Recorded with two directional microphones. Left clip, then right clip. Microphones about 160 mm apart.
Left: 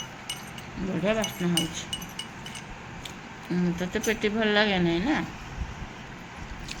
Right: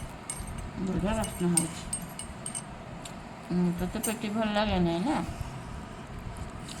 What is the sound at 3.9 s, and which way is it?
Speech, 15° left (ahead or behind).